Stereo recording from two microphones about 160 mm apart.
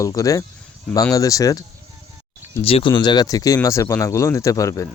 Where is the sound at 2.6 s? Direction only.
35° left (ahead or behind).